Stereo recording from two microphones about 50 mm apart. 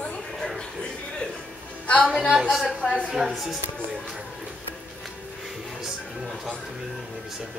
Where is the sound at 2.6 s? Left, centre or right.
Centre.